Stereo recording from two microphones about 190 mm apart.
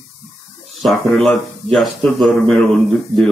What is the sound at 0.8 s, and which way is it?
Speech, centre (ahead or behind).